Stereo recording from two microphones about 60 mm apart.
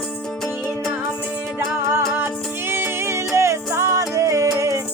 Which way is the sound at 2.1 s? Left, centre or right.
Right.